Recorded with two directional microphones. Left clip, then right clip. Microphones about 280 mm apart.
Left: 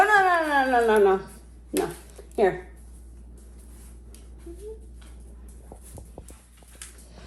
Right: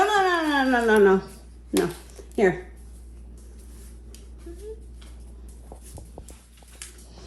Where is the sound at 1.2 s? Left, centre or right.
Centre.